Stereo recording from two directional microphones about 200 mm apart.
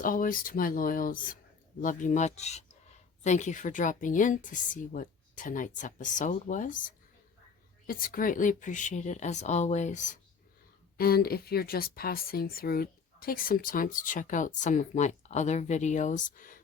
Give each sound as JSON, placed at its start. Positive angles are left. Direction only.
{"t": 0.0, "sound": "speech", "side_deg": 45}
{"t": 10.9, "sound": "speech", "side_deg": 50}